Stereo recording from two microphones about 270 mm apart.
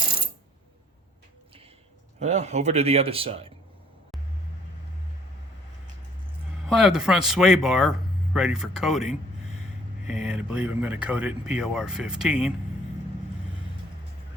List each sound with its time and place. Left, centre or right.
2.1 s speech: right
6.7 s speech: centre